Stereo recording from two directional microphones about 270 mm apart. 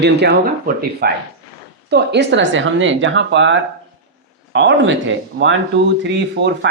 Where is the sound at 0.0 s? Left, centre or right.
Right.